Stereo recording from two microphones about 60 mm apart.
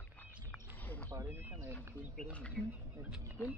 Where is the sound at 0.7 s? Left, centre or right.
Left.